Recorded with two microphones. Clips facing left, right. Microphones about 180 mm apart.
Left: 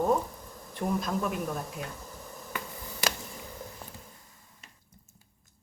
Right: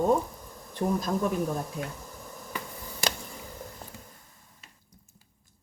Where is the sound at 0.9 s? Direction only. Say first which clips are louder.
Right 1 dB; 35° right (ahead or behind).